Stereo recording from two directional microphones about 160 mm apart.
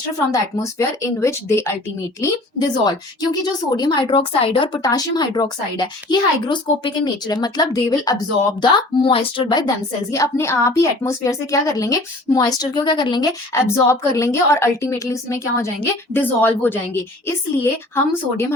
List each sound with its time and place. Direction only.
0.3 s a woman's voice: 20° left (ahead or behind)
13.5 s a woman's voice: 15° left (ahead or behind)